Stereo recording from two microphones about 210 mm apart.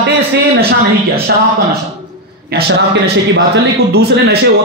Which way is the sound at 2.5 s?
45° right (ahead or behind).